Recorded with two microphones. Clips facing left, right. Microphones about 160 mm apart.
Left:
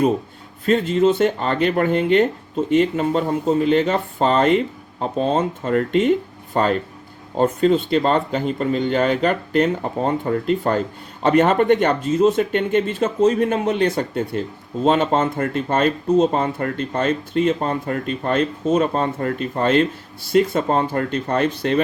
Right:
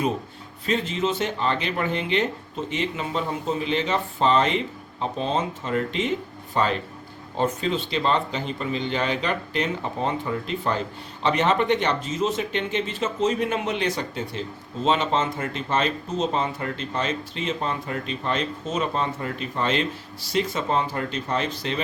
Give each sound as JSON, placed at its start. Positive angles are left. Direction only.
{"t": 0.6, "sound": "speech", "side_deg": 50}